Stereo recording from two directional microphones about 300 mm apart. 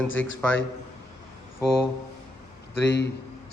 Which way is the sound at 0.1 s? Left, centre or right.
Left.